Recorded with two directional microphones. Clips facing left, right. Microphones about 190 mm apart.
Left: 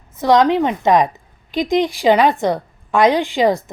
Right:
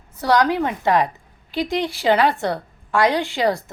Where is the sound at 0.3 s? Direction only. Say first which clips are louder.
Left 5 dB; 20° left (ahead or behind).